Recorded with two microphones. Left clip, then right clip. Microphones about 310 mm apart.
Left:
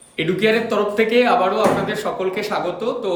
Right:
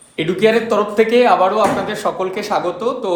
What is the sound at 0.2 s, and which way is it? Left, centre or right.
A man's voice, centre.